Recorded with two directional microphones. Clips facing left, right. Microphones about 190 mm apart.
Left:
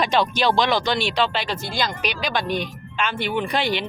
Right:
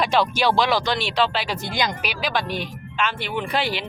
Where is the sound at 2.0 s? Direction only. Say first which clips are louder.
Left 1 dB; 5° right (ahead or behind).